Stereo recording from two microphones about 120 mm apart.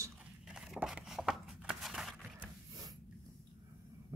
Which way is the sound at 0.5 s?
5° right (ahead or behind).